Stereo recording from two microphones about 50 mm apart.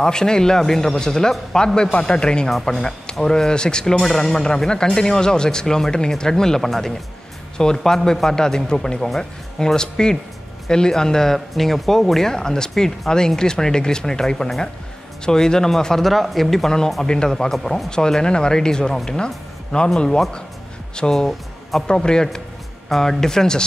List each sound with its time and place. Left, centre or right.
0.0 s speech: centre